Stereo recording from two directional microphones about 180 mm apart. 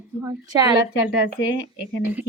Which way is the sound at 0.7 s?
60° left (ahead or behind).